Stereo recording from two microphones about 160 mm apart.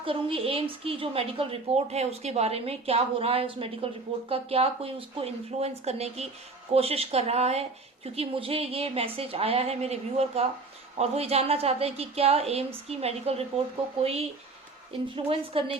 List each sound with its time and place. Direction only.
0.0 s a woman's voice: 35° right (ahead or behind)